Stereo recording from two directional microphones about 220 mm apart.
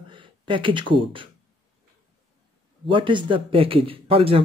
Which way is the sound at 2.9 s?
20° right (ahead or behind).